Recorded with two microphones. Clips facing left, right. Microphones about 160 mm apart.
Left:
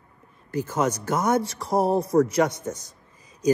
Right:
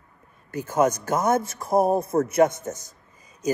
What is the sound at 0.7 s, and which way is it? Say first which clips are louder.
Speech: right 5 dB; 10° right (ahead or behind).